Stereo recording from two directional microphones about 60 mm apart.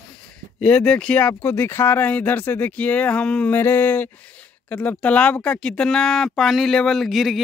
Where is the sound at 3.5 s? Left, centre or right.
Left.